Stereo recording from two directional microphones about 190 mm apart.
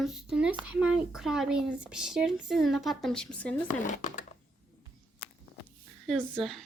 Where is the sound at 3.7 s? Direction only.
40° left (ahead or behind).